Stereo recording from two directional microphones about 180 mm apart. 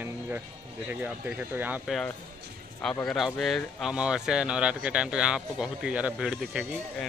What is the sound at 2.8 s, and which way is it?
Speech, 5° left (ahead or behind).